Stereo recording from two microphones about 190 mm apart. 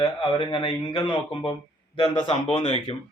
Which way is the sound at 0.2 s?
25° left (ahead or behind).